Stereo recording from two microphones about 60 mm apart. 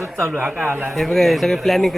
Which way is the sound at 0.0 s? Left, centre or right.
Right.